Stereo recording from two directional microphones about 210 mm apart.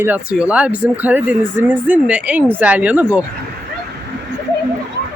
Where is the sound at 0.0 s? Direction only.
5° right (ahead or behind).